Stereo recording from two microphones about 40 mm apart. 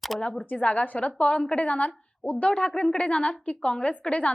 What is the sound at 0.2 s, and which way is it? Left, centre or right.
A woman's voice, left.